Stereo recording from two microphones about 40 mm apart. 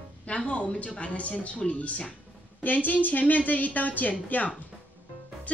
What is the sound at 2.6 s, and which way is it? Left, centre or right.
A woman's voice, left.